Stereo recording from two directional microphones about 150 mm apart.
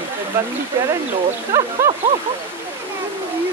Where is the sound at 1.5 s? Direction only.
15° right (ahead or behind).